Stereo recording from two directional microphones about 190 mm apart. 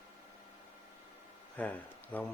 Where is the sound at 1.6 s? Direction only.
10° left (ahead or behind).